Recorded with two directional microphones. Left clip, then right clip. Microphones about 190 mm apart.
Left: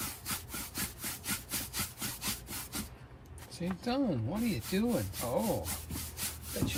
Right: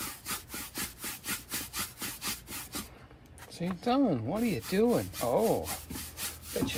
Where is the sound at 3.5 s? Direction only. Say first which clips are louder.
Right 5 dB; 35° right (ahead or behind).